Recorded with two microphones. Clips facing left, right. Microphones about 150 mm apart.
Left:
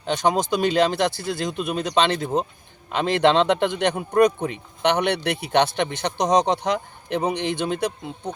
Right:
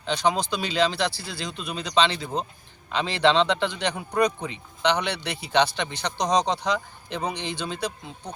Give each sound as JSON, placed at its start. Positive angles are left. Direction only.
{"t": 0.0, "sound": "speech", "side_deg": 50}